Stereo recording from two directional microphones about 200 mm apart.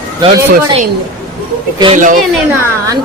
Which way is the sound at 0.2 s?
25° right (ahead or behind).